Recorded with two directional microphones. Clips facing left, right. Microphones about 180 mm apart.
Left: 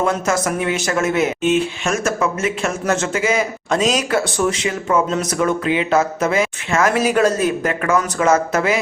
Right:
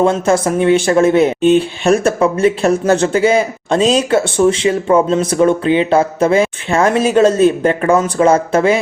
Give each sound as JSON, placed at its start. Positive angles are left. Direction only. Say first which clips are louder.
{"t": 0.0, "sound": "speech", "louder": "right 6 dB", "side_deg": -30}